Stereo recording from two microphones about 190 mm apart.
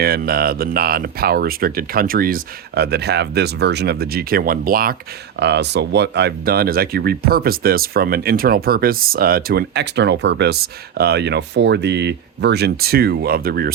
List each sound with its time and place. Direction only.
0.0 s speech: 55° right (ahead or behind)
5.4 s speech: 60° right (ahead or behind)